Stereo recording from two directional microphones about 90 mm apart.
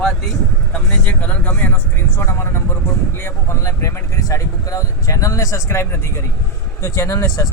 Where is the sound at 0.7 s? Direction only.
15° left (ahead or behind).